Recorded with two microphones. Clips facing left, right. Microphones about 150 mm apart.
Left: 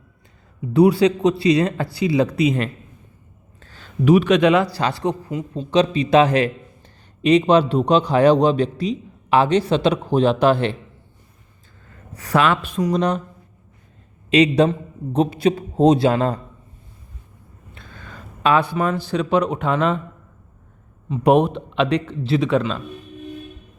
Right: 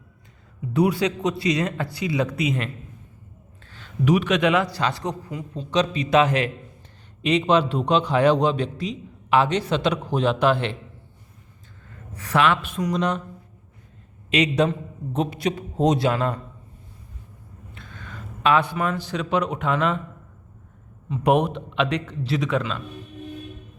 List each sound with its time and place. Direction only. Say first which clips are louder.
0.7 s a man's voice: left 7 dB; 30° left (ahead or behind)
11.9 s speech: left 5 dB; 35° left (ahead or behind)
14.3 s a man's voice: left 6 dB; 30° left (ahead or behind)
17.7 s speech: even; 35° left (ahead or behind)
21.1 s a man's voice: left 4 dB; 30° left (ahead or behind)